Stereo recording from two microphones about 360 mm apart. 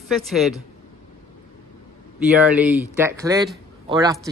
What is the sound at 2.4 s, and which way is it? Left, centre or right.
Speech, centre.